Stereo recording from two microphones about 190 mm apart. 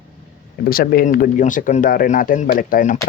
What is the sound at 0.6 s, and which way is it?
Speech, 50° left (ahead or behind).